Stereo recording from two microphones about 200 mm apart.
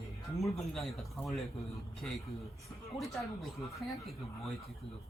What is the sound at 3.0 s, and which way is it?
Speech, centre (ahead or behind).